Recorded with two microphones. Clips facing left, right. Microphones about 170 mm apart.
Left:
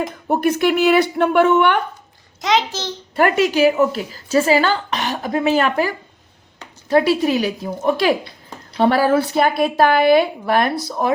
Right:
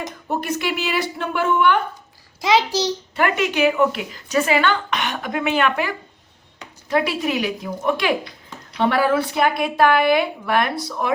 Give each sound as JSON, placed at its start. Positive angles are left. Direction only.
{"t": 0.3, "sound": "speech", "side_deg": 55}
{"t": 3.2, "sound": "speech", "side_deg": 40}
{"t": 6.9, "sound": "speech", "side_deg": 35}